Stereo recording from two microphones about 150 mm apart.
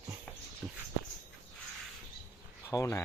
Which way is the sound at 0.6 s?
5° right (ahead or behind).